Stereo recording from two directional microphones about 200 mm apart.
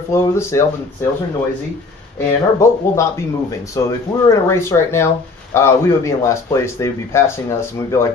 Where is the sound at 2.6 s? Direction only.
15° left (ahead or behind).